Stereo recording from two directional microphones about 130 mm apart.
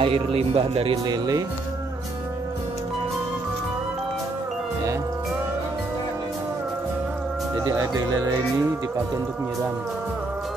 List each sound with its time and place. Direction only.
0.0 s speech: 45° right (ahead or behind)
7.6 s speech: 25° right (ahead or behind)